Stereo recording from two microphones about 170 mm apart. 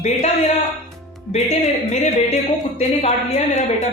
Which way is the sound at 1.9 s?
40° left (ahead or behind).